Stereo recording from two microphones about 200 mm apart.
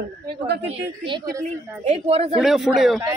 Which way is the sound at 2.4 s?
Centre (ahead or behind).